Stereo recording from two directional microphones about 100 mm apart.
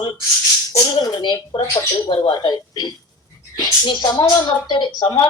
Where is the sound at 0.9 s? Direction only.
50° left (ahead or behind).